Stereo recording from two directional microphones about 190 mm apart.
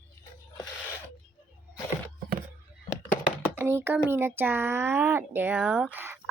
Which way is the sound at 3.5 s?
10° right (ahead or behind).